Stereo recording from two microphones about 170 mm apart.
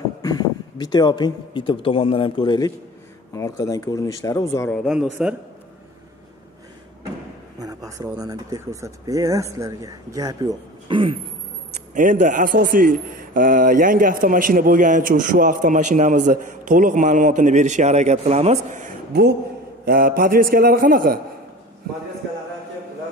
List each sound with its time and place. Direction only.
0.2 s speech: 25° left (ahead or behind)
4.7 s speech: centre (ahead or behind)
7.5 s a sound: 20° right (ahead or behind)
8.2 s speech: 20° right (ahead or behind)
11.9 s a man's voice: 50° right (ahead or behind)
19.8 s a man's voice: 60° right (ahead or behind)